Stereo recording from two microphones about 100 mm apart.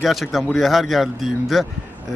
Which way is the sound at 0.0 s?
Centre (ahead or behind).